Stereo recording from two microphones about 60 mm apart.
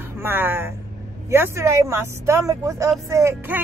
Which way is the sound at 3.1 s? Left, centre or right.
Right.